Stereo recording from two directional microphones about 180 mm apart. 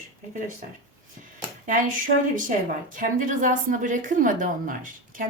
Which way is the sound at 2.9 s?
45° right (ahead or behind).